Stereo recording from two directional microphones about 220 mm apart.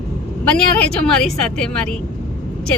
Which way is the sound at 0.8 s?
5° left (ahead or behind).